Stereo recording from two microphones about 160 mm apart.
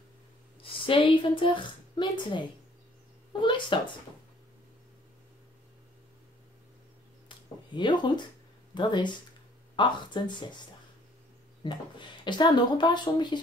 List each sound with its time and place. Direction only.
0.6 s a woman's voice: 35° left (ahead or behind)
7.2 s a sound: 30° left (ahead or behind)
8.7 s speech: 30° left (ahead or behind)
11.6 s speech: 30° left (ahead or behind)